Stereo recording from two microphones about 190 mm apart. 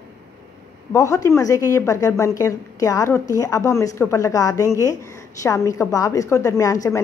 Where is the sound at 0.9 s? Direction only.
15° left (ahead or behind).